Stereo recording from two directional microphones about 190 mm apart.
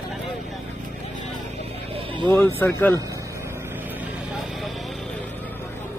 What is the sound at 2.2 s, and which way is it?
Speech, 15° left (ahead or behind).